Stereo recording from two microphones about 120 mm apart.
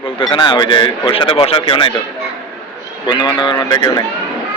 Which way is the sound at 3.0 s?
40° left (ahead or behind).